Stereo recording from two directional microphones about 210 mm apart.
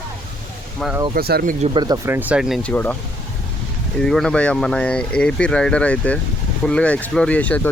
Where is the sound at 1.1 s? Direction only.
45° right (ahead or behind).